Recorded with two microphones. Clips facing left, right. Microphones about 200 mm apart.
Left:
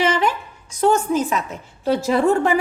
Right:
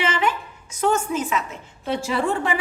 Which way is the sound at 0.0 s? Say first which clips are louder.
Left 4 dB; 40° left (ahead or behind).